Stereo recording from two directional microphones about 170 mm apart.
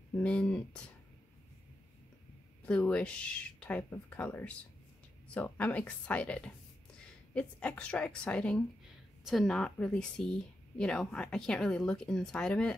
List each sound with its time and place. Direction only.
0.1 s speech: 5° left (ahead or behind)
2.6 s speech: 5° left (ahead or behind)